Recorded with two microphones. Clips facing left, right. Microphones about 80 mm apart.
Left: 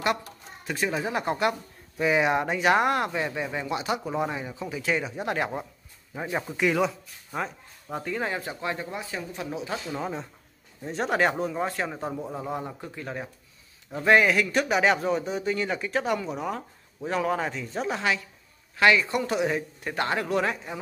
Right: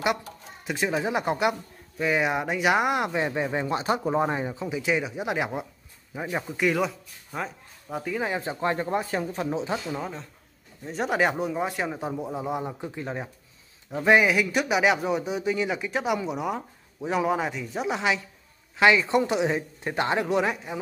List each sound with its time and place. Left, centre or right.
0.7 s speech: centre
2.0 s speech: centre; by 4.6 s right
4.6 s speech: centre
8.3 s speech: right
8.6 s speech: right
9.5 s speech: right
9.9 s speech: centre
10.9 s speech: centre